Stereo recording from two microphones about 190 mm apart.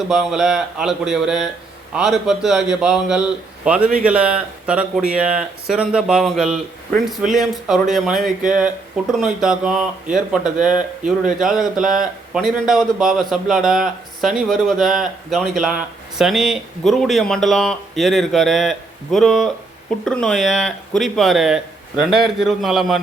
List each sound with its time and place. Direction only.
0.1 s speech: centre (ahead or behind)
8.1 s speech: 45° right (ahead or behind)
8.4 s speech: 5° right (ahead or behind)